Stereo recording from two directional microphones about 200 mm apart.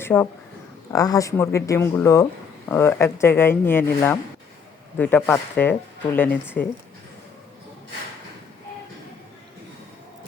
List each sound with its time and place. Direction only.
0.0 s speech: 10° left (ahead or behind)